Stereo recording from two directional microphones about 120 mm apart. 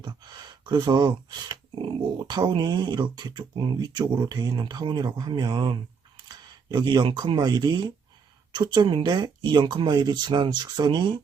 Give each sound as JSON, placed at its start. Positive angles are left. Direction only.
{"t": 0.0, "sound": "speech", "side_deg": -35}